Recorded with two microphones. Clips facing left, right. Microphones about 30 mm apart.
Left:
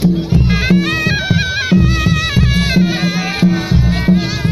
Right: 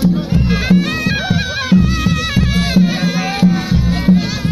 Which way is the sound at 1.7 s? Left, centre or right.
Left.